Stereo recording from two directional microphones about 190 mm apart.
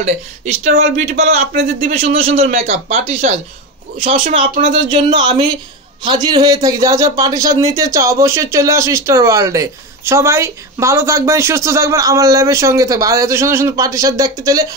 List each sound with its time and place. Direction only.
0.0 s speech: 35° right (ahead or behind)
6.0 s a man's voice: 20° right (ahead or behind)